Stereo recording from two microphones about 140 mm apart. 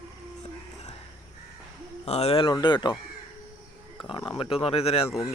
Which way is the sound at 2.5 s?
35° left (ahead or behind).